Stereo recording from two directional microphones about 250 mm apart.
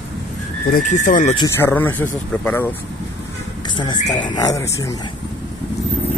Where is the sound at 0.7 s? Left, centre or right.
Left.